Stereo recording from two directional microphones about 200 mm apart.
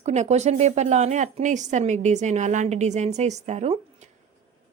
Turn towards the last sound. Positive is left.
turn(degrees=-35)  # may be behind; listen again after turning